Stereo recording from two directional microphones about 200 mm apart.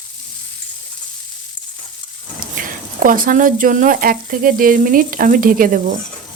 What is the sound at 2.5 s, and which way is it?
Speech, 45° right (ahead or behind).